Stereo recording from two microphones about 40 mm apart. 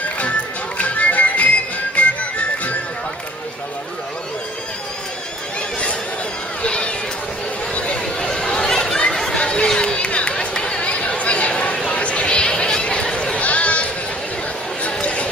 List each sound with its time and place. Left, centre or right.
0.8 s music: left
6.6 s run: left
7.8 s chatter: left
8.3 s a sound: centre
9.4 s chatter: left
13.3 s chatter: left
14.8 s chatter: left